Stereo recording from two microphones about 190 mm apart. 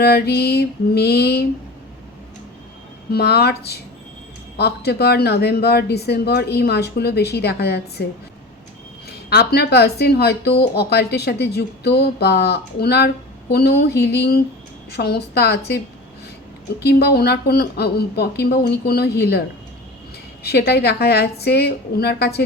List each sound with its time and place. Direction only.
0.0 s speech: 60° left (ahead or behind)
3.1 s speech: 55° left (ahead or behind)
9.0 s speech: 55° left (ahead or behind)
16.8 s speech: 60° left (ahead or behind)
20.4 s speech: 60° left (ahead or behind)